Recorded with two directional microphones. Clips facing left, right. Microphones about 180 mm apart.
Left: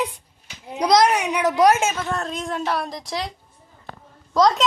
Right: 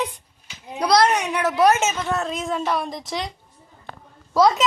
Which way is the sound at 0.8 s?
15° left (ahead or behind).